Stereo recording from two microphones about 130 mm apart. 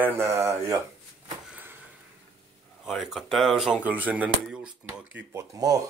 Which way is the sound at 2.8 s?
Centre (ahead or behind).